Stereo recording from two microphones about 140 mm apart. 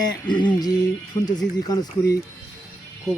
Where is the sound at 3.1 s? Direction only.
Centre (ahead or behind).